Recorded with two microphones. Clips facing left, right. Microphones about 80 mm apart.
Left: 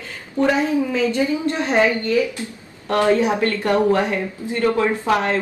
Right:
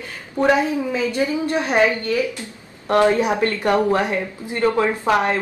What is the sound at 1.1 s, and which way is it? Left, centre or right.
Speech, centre.